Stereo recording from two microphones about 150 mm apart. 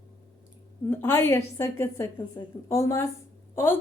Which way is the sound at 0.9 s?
15° left (ahead or behind).